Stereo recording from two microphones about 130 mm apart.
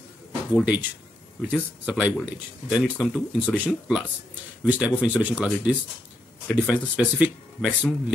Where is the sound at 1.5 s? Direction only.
10° right (ahead or behind).